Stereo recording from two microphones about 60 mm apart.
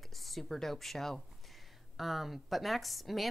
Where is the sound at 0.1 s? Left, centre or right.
Centre.